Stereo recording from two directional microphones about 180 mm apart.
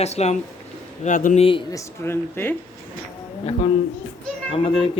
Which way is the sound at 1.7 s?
15° left (ahead or behind).